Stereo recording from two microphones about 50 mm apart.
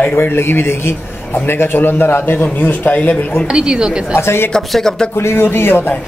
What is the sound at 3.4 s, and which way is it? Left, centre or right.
Speech, centre.